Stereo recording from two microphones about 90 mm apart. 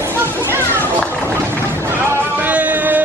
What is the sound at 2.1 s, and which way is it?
Music, 20° right (ahead or behind).